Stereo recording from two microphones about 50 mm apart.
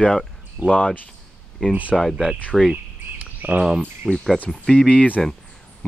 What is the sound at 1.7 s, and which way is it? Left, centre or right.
Speech, right.